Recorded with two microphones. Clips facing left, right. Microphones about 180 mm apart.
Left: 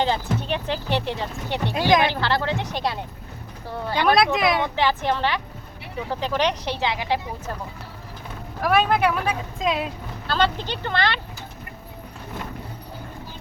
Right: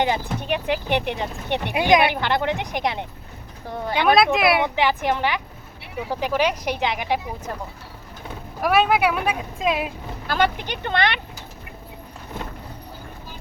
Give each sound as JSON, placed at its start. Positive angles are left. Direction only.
{"t": 0.0, "sound": "speech", "side_deg": -15}
{"t": 4.1, "sound": "speech", "side_deg": 0}
{"t": 8.6, "sound": "speech", "side_deg": -5}